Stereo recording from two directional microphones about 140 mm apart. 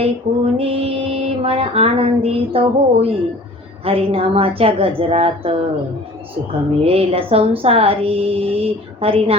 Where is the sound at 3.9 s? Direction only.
40° right (ahead or behind).